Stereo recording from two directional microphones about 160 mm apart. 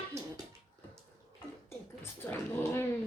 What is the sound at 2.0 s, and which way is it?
Speech, 15° left (ahead or behind).